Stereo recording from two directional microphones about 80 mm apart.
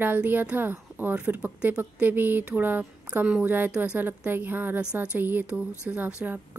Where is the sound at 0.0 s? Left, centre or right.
Right.